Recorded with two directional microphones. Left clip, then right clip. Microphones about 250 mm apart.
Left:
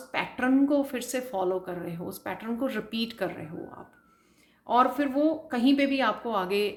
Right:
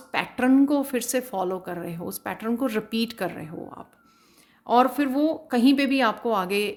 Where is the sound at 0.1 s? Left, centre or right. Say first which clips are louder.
Right 4 dB; right.